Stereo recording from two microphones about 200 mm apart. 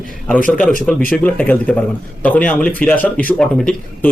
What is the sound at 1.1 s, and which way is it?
Speech, 5° left (ahead or behind).